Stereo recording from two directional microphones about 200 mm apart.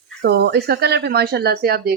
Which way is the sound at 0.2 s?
55° right (ahead or behind).